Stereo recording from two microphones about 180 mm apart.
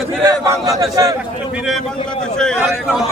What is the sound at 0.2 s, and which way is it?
Speech, 15° right (ahead or behind).